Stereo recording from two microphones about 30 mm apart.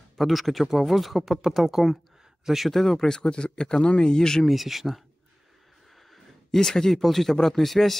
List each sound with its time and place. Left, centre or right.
0.2 s speech: centre
2.7 s speech: centre
3.1 s speech: left
4.5 s speech: centre
6.0 s a sound: centre
7.0 s speech: centre